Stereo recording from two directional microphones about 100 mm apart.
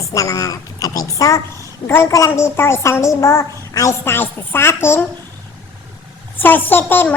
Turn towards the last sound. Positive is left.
turn(degrees=20)  # may be behind; listen again after turning